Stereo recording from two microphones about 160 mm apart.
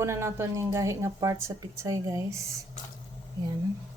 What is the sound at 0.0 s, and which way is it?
Speech, 15° right (ahead or behind).